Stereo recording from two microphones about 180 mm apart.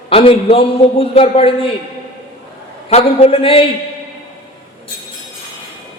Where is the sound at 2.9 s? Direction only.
35° left (ahead or behind).